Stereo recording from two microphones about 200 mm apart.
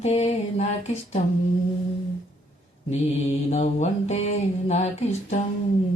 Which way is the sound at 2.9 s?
30° left (ahead or behind).